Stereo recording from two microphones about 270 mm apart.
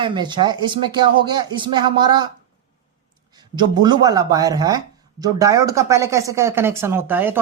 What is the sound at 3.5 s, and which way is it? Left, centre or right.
Speech, centre.